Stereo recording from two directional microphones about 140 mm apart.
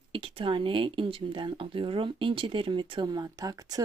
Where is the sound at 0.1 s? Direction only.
40° right (ahead or behind).